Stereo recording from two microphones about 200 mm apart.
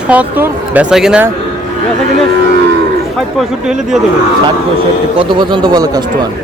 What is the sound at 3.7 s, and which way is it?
Speech, 5° right (ahead or behind).